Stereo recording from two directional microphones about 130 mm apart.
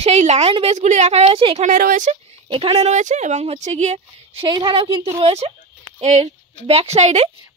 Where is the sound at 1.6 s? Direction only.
75° right (ahead or behind).